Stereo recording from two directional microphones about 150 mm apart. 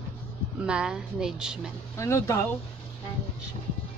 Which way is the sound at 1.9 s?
20° left (ahead or behind).